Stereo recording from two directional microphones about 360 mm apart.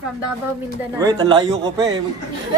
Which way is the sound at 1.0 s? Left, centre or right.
Centre.